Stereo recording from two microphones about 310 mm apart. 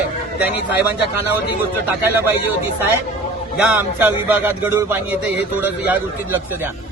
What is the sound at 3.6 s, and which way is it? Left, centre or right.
A man's voice, centre.